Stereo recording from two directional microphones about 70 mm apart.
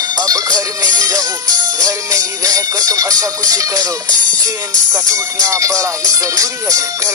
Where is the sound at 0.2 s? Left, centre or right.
Right.